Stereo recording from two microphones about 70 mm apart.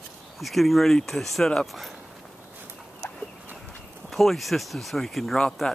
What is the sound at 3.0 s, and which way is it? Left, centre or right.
Fowl, left.